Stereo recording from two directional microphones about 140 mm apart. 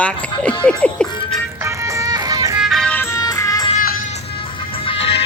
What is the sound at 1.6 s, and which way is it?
Music, 20° right (ahead or behind).